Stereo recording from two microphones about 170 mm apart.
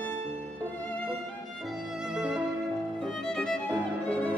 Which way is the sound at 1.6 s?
Centre (ahead or behind).